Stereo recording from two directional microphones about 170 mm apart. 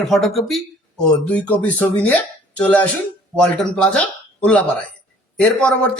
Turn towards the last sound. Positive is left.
turn(degrees=5)  # may be behind; listen again after turning